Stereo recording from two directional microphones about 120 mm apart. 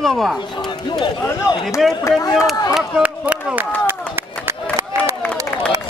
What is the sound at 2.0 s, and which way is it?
Speech, 30° left (ahead or behind).